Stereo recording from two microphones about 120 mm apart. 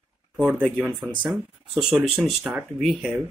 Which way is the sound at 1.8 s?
5° right (ahead or behind).